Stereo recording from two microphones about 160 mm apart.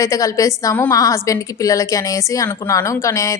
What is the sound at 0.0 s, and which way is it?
A woman's voice, 20° left (ahead or behind).